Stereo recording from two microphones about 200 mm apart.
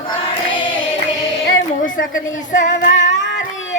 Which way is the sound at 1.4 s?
45° left (ahead or behind).